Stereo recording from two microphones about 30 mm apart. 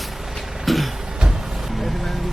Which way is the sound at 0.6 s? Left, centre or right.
Centre.